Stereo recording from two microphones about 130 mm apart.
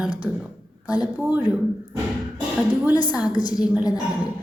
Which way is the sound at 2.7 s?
15° right (ahead or behind).